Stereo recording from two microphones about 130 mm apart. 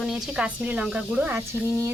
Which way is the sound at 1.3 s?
20° right (ahead or behind).